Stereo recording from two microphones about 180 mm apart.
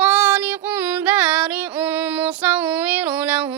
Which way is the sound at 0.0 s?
5° right (ahead or behind).